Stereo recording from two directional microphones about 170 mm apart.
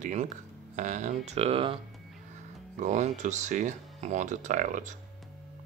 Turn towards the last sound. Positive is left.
turn(degrees=-45)  # may be behind; listen again after turning